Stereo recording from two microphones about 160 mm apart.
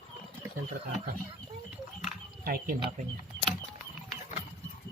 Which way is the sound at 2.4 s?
65° right (ahead or behind).